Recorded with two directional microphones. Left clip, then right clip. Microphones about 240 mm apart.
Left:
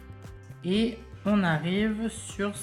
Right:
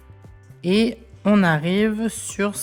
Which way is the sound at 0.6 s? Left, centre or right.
Right.